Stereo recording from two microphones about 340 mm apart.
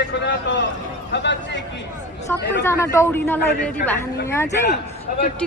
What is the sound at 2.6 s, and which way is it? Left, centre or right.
Speech, centre.